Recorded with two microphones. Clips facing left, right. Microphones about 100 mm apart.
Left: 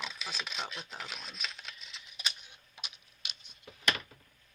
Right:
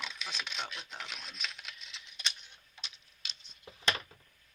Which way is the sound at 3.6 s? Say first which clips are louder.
Even; 25° right (ahead or behind).